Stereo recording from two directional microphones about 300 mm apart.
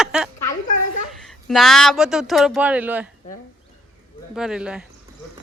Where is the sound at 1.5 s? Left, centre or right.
Centre.